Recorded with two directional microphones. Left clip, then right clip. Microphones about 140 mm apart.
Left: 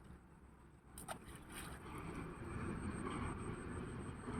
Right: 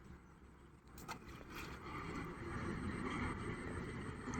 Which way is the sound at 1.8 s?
25° right (ahead or behind).